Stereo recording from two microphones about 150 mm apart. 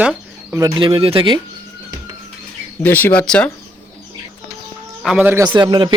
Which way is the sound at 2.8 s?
15° left (ahead or behind).